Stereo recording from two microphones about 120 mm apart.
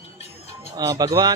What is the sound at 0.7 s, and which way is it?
Speech, 30° right (ahead or behind).